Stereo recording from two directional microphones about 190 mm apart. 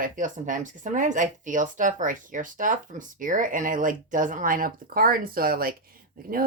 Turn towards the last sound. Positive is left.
turn(degrees=-50)  # may be behind; listen again after turning